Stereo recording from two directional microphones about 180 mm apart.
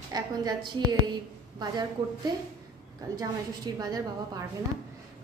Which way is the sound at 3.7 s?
20° right (ahead or behind).